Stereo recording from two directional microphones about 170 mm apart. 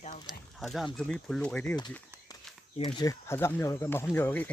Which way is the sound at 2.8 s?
25° left (ahead or behind).